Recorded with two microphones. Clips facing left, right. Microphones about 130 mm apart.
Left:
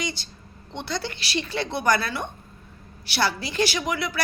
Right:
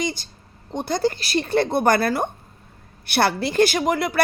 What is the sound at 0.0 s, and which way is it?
A woman's voice, 45° right (ahead or behind).